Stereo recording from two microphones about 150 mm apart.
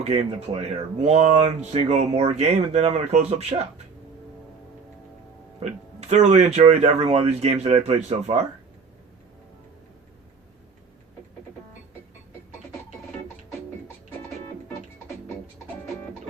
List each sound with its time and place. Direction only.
0.0 s speech: 50° right (ahead or behind)
5.6 s speech: 45° right (ahead or behind)